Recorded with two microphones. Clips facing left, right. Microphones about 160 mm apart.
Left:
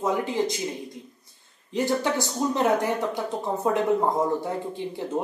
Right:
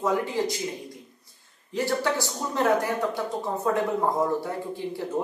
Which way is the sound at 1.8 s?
20° left (ahead or behind).